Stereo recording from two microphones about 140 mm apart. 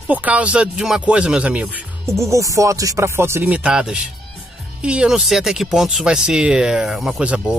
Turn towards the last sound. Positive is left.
turn(degrees=-10)  # may be behind; listen again after turning